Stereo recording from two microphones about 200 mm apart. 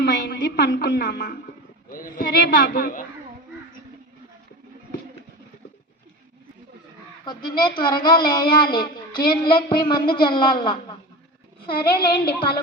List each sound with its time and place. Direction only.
0.0 s a woman's voice: 60° left (ahead or behind)
7.8 s a woman's voice: 20° left (ahead or behind)
11.7 s a woman's voice: 50° left (ahead or behind)